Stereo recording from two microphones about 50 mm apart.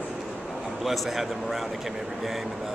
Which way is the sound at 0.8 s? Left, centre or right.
Centre.